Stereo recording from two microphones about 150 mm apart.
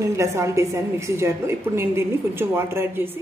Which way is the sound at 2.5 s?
15° right (ahead or behind).